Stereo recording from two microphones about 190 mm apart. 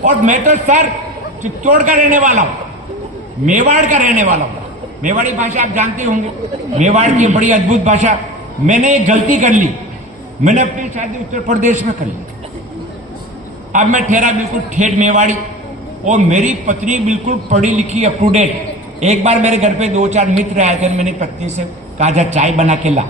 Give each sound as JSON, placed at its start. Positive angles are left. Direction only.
{"t": 0.0, "sound": "a man's voice", "side_deg": -40}
{"t": 3.4, "sound": "a man's voice", "side_deg": -40}
{"t": 13.7, "sound": "a man's voice", "side_deg": -40}